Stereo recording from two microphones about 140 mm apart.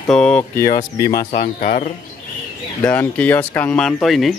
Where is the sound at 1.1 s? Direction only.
90° left.